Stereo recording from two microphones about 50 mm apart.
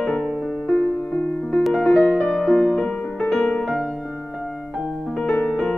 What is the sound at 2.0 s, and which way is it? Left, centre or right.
Music, left.